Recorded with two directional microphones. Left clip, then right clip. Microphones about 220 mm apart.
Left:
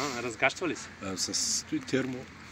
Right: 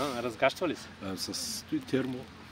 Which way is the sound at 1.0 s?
Centre (ahead or behind).